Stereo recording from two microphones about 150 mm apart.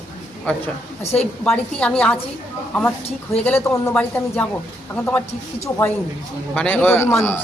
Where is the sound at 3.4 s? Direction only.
10° left (ahead or behind).